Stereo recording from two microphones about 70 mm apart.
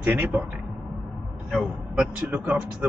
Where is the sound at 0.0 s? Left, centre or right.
Right.